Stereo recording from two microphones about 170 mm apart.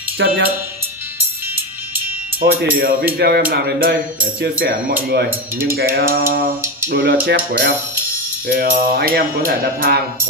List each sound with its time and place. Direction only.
0.2 s speech: 90° right
2.7 s music: 60° right (ahead or behind)
6.9 s speech: 70° right (ahead or behind)
8.5 s music: 60° right (ahead or behind)